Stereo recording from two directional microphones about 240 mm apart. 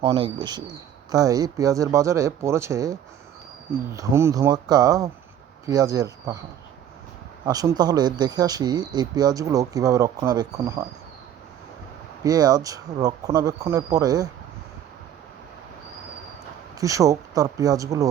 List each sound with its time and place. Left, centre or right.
0.0 s speech: centre
7.4 s speech: centre
12.2 s speech: centre
16.8 s speech: centre